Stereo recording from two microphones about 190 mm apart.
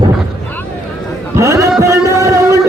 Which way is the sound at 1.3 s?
15° right (ahead or behind).